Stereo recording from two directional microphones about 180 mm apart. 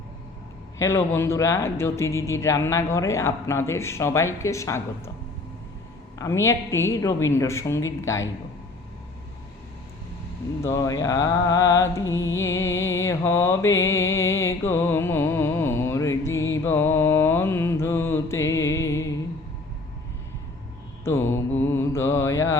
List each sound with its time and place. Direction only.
0.8 s speech: 15° left (ahead or behind)
6.1 s speech: 15° left (ahead or behind)
10.6 s music: 15° left (ahead or behind)
12.4 s mantra: 15° left (ahead or behind)
21.0 s speech: 15° left (ahead or behind)